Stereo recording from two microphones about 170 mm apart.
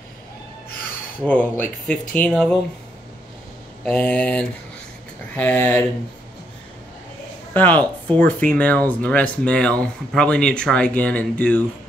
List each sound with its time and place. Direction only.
1.2 s speech: 10° left (ahead or behind)
3.8 s speech: 10° left (ahead or behind)
7.5 s speech: 10° left (ahead or behind)